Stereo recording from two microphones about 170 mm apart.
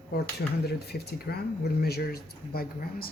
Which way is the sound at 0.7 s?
70° left (ahead or behind).